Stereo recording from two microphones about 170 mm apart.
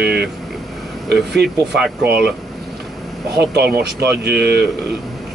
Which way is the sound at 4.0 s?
70° right (ahead or behind).